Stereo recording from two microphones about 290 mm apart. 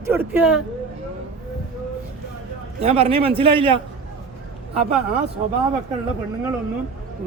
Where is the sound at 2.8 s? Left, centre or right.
Centre.